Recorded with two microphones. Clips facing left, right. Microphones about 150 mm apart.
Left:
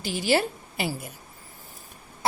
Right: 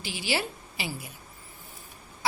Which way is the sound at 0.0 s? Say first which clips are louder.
Left 7 dB; 45° left (ahead or behind).